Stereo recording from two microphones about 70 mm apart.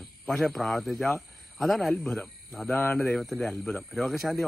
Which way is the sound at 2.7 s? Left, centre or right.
Left.